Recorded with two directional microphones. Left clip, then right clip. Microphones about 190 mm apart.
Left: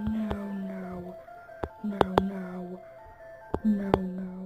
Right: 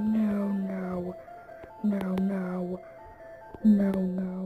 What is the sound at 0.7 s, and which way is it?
Music, centre (ahead or behind).